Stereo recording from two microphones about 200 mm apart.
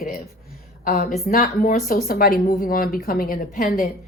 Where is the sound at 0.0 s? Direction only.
45° left (ahead or behind).